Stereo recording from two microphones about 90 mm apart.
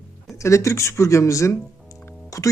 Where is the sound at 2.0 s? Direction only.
35° left (ahead or behind).